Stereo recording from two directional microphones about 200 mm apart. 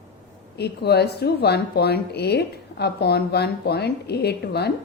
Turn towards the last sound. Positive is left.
turn(degrees=55)  # may be behind; listen again after turning